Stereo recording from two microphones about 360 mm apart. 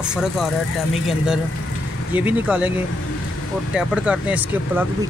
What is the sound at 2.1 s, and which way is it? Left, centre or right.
Speech, centre.